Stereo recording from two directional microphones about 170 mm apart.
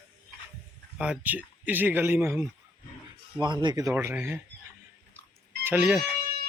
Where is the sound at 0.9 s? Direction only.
5° right (ahead or behind).